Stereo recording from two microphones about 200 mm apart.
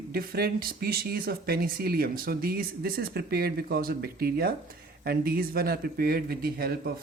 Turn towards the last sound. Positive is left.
turn(degrees=-50)  # may be behind; listen again after turning